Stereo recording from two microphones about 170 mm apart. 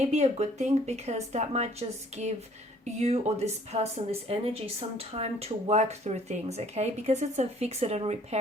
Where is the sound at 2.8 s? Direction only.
40° right (ahead or behind).